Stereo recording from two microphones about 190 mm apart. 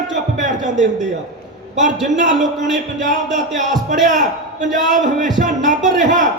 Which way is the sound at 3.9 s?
40° right (ahead or behind).